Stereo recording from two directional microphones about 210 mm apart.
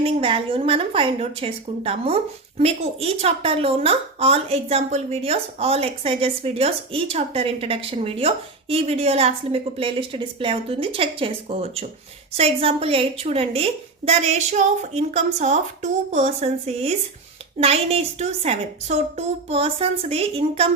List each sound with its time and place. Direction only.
0.0 s a woman's voice: 25° right (ahead or behind)